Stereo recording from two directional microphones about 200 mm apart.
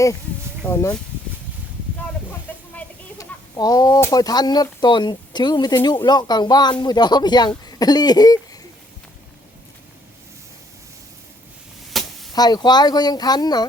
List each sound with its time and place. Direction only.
0.6 s speech: 15° left (ahead or behind)
2.7 s speech: 15° left (ahead or behind)
11.9 s chop: centre (ahead or behind)
12.3 s speech: 20° left (ahead or behind)